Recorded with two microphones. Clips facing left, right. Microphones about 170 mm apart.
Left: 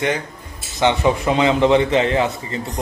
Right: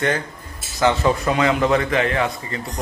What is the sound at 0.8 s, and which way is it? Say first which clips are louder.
A man's voice: left 1 dB; 20° left (ahead or behind).